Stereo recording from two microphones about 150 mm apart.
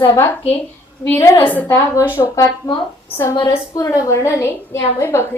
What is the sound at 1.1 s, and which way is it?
A woman's voice, 20° left (ahead or behind).